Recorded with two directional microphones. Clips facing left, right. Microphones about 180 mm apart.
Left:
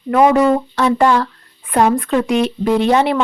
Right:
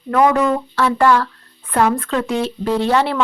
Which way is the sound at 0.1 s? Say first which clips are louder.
Left 3 dB; 15° left (ahead or behind).